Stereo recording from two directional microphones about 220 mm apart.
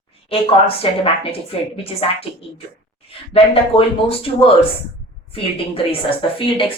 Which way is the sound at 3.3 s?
25° left (ahead or behind).